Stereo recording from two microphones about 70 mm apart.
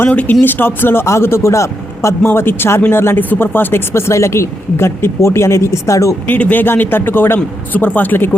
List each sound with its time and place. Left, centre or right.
0.0 s a man's voice: left
6.2 s a man's voice: left